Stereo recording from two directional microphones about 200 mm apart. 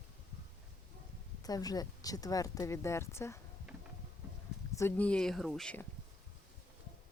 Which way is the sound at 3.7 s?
Centre (ahead or behind).